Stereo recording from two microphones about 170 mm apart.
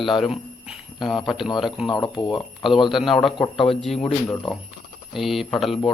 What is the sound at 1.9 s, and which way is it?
Speech, 25° left (ahead or behind).